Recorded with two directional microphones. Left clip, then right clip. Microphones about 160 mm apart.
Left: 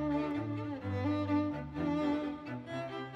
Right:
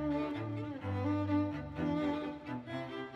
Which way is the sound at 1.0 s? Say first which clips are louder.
Left 1 dB; 25° left (ahead or behind).